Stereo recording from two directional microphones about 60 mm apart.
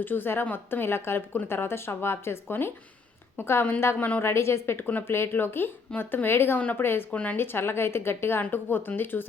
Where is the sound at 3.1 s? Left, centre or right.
Left.